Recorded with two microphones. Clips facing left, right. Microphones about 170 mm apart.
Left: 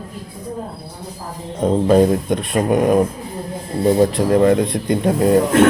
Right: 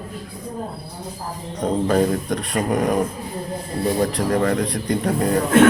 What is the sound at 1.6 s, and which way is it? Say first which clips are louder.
Speech: left 5 dB; 25° left (ahead or behind).